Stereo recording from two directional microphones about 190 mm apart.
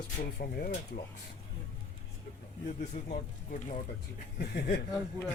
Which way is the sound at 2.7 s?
40° left (ahead or behind).